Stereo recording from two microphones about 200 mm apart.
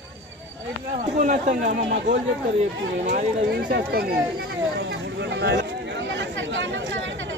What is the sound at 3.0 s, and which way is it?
Speech, 40° right (ahead or behind).